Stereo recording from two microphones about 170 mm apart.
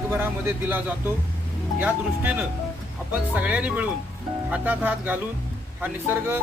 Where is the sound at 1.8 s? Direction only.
10° right (ahead or behind).